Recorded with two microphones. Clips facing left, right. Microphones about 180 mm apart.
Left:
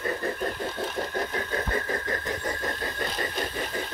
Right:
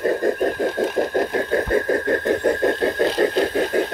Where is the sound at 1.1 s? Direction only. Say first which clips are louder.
Right 10 dB; 55° right (ahead or behind).